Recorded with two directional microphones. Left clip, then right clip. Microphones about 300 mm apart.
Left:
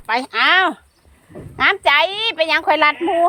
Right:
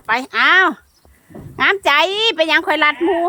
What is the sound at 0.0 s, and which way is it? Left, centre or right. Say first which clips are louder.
A woman's voice: right 2 dB; centre.